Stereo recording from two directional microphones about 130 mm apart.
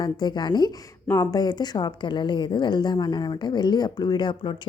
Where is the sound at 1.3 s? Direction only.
30° left (ahead or behind).